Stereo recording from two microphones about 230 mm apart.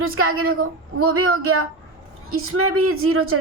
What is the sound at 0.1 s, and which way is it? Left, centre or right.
A woman's voice, right.